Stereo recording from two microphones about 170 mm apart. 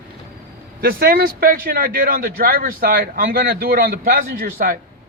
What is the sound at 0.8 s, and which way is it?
Speech, 60° right (ahead or behind).